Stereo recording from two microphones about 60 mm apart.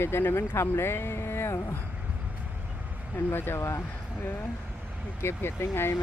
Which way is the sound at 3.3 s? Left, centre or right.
Left.